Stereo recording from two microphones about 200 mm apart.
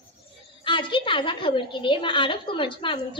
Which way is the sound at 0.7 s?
25° left (ahead or behind).